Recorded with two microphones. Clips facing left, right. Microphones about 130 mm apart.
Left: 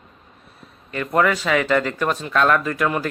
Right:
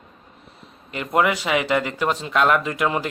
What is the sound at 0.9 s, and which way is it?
Speech, 20° right (ahead or behind).